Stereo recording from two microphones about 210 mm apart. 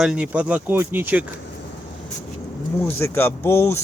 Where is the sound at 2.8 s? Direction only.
10° left (ahead or behind).